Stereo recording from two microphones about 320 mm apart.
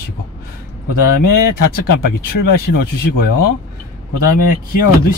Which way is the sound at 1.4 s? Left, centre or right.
Left.